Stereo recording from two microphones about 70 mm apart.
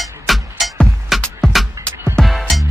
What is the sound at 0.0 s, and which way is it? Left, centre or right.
Music, centre.